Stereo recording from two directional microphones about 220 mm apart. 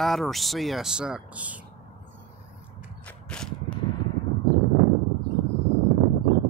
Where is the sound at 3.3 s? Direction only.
5° left (ahead or behind).